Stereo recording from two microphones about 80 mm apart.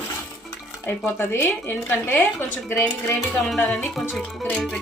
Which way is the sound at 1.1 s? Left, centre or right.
Left.